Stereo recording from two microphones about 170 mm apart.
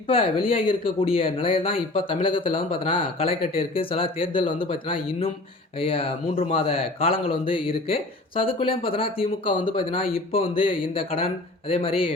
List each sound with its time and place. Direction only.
0.1 s speech: 35° left (ahead or behind)